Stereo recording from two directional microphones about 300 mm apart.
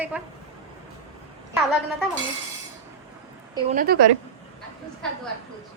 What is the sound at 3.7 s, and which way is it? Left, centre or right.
Speech, right.